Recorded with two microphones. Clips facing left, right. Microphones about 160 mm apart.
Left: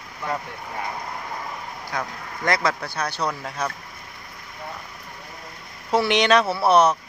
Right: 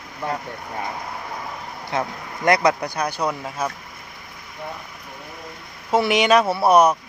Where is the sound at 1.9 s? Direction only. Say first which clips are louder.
Right 5 dB; 20° right (ahead or behind).